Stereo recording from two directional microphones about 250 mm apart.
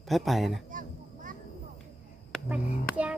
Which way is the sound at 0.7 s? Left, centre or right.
Right.